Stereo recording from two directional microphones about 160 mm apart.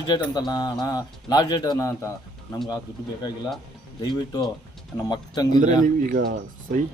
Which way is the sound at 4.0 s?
25° left (ahead or behind).